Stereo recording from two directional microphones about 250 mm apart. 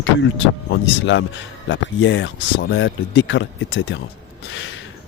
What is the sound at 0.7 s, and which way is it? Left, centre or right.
Speech, left.